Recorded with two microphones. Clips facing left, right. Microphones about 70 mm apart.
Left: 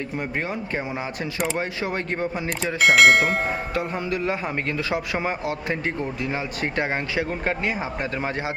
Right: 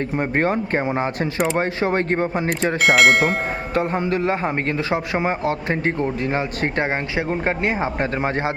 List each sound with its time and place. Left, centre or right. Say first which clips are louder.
0.2 s a man's voice: right 9 dB; right
2.8 s speech: even; centre
3.8 s a man's voice: right 8 dB; right